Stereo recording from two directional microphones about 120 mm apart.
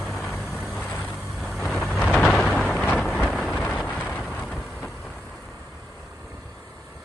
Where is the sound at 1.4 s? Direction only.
Centre (ahead or behind).